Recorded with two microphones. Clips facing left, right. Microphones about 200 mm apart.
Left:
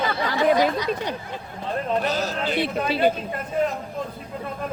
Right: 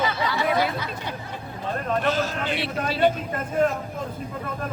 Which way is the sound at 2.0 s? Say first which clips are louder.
Even; 40° left (ahead or behind).